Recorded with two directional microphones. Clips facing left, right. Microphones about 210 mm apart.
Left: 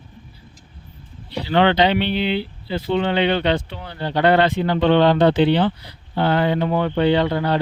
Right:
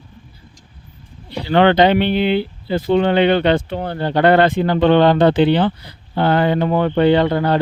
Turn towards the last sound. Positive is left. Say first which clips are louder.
# right 4 dB
turn(degrees=-50)  # may be behind; listen again after turning